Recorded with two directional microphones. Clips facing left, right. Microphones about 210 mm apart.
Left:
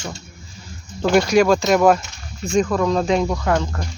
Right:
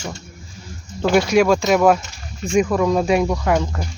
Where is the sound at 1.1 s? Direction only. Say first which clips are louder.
Even; centre (ahead or behind).